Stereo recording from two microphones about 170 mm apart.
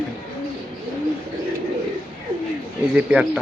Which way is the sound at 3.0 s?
5° right (ahead or behind).